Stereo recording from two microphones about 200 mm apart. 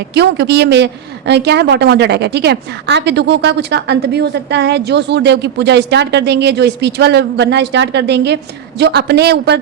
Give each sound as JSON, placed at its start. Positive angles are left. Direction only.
{"t": 0.1, "sound": "a woman's voice", "side_deg": -55}